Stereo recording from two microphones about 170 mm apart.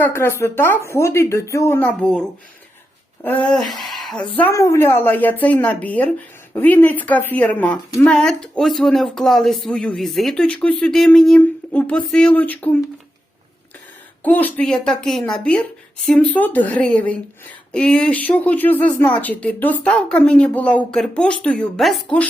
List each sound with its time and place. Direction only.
0.0 s speech: 15° left (ahead or behind)
3.2 s a woman's voice: 10° left (ahead or behind)
14.3 s a woman's voice: 10° left (ahead or behind)